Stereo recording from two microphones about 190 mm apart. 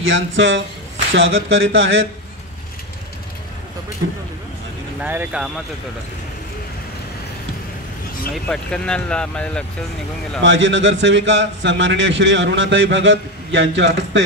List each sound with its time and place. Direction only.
0.0 s speech: 85° right
5.0 s speech: 10° right (ahead or behind)
8.5 s speech: 5° left (ahead or behind)
10.4 s a man's voice: 75° right (ahead or behind)